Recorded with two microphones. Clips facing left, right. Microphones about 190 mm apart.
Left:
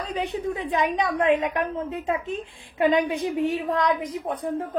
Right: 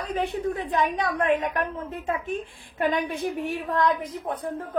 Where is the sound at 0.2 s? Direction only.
15° left (ahead or behind).